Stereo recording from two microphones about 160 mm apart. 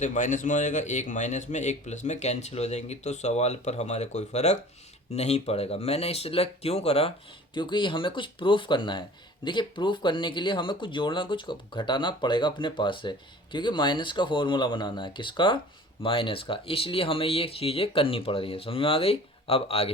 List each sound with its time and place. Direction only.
0.0 s speech: 50° left (ahead or behind)